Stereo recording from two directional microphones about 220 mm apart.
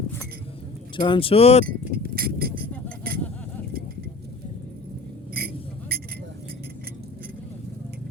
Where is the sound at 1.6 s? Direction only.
45° right (ahead or behind).